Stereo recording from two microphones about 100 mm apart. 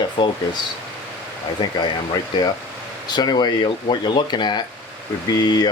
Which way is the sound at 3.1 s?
45° left (ahead or behind).